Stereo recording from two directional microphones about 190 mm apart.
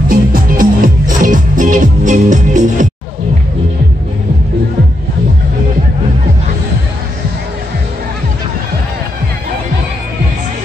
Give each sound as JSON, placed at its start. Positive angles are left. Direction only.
{"t": 0.1, "sound": "music", "side_deg": -50}